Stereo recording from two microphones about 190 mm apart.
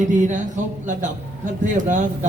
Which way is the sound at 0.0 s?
40° right (ahead or behind).